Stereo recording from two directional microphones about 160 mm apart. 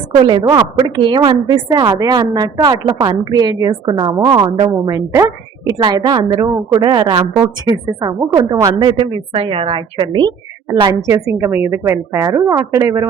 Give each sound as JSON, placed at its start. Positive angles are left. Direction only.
{"t": 0.3, "sound": "a woman's voice", "side_deg": -25}
{"t": 7.3, "sound": "a woman's voice", "side_deg": -20}
{"t": 11.1, "sound": "a woman's voice", "side_deg": -15}